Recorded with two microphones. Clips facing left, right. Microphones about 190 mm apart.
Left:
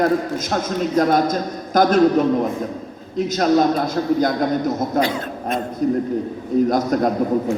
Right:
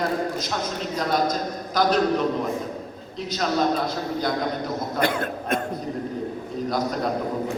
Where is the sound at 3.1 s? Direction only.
45° left (ahead or behind).